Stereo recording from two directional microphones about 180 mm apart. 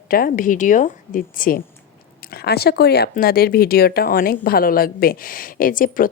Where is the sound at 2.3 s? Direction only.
60° left (ahead or behind).